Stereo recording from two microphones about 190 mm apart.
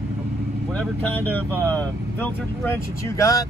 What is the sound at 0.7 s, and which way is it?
Speech, 10° left (ahead or behind).